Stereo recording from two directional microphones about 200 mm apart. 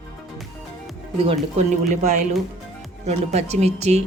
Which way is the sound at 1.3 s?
35° right (ahead or behind).